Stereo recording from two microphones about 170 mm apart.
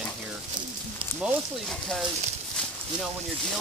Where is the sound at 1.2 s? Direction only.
Centre (ahead or behind).